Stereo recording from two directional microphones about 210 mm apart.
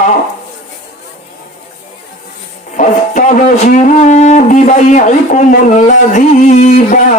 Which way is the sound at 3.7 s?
35° left (ahead or behind).